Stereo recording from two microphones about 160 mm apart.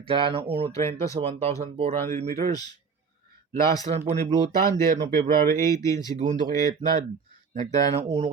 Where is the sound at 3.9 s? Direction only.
35° right (ahead or behind).